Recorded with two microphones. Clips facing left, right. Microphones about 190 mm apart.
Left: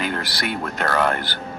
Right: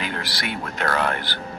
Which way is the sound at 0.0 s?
45° left (ahead or behind).